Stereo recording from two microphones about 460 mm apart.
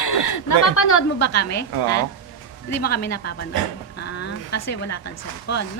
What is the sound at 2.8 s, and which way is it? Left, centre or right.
Speech, centre.